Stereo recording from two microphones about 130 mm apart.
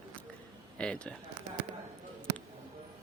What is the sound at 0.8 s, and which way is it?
Speech, 5° left (ahead or behind).